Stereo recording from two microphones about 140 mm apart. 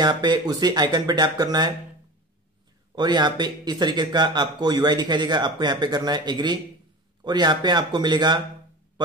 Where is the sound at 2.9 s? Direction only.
30° right (ahead or behind).